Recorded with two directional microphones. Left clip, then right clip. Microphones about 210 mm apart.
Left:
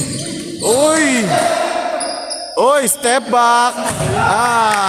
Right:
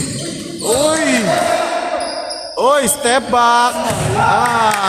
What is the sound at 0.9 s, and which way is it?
Basketball bounce, 35° left (ahead or behind).